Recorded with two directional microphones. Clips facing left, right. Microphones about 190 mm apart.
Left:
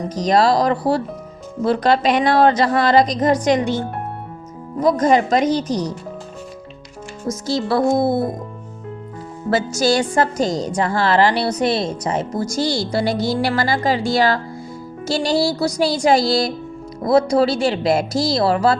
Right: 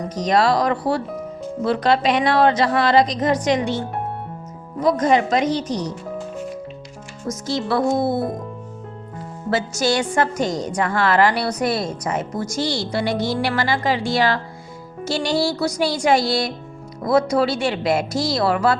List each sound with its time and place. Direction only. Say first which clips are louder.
0.2 s a woman's voice: left 2 dB; 35° left (ahead or behind)
4.8 s a woman's voice: left 2 dB; 40° left (ahead or behind)
7.3 s a woman's voice: left 2 dB; 35° left (ahead or behind)
9.5 s a woman's voice: left 3 dB; 40° left (ahead or behind)